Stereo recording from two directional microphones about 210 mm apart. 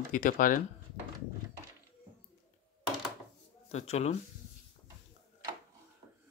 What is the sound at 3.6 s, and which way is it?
Speech, 30° left (ahead or behind).